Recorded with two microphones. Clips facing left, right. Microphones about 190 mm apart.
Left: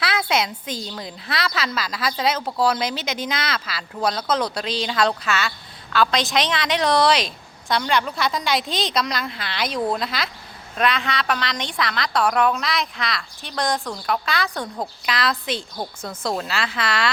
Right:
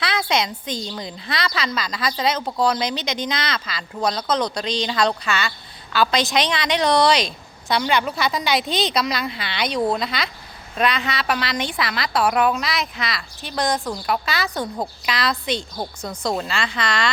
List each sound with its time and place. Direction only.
0.0 s a woman's voice: 5° left (ahead or behind)